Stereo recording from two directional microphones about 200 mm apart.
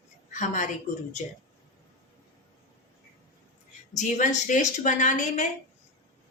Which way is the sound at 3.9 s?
35° left (ahead or behind).